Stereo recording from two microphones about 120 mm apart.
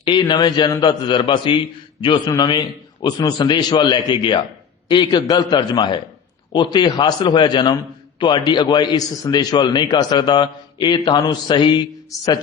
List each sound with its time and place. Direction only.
0.0 s a man's voice: 40° left (ahead or behind)